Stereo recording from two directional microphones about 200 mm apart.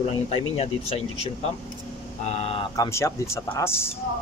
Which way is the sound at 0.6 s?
30° left (ahead or behind).